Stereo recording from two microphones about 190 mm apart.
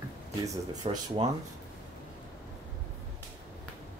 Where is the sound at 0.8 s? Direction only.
30° right (ahead or behind).